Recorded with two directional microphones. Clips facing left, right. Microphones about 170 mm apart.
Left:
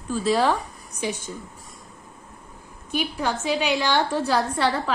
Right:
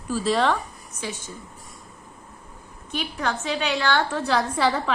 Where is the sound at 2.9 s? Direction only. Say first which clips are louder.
Left 2 dB; 10° left (ahead or behind).